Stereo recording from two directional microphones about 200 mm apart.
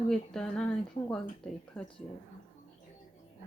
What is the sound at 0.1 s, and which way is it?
Speech, 5° left (ahead or behind).